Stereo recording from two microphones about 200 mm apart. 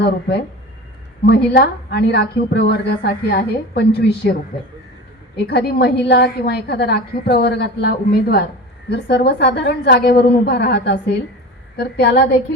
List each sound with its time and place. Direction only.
1.2 s a woman's voice: 50° left (ahead or behind)
5.5 s a woman's voice: 55° left (ahead or behind)